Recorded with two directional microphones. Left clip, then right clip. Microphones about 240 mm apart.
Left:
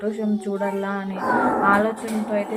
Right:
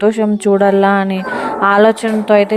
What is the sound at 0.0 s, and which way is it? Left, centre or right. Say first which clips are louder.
Speech: right 13 dB; right.